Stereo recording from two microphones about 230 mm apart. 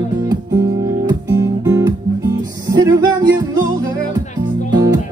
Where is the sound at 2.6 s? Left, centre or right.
Centre.